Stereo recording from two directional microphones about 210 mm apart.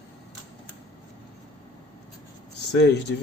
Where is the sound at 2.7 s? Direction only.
55° left (ahead or behind).